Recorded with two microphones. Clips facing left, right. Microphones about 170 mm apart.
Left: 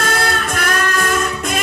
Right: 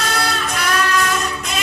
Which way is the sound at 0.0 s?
50° left (ahead or behind).